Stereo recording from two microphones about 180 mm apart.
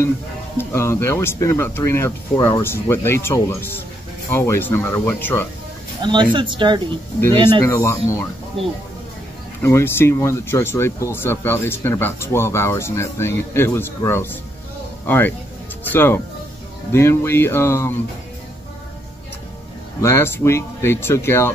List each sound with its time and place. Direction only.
0.6 s speech: 15° left (ahead or behind)
6.0 s speech: 25° right (ahead or behind)
7.6 s speech: 15° left (ahead or behind)
9.6 s speech: 15° left (ahead or behind)
20.0 s speech: 15° left (ahead or behind)